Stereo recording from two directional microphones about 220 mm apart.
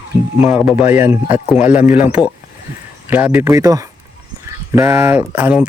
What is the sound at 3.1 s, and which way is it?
A man's voice, 5° right (ahead or behind).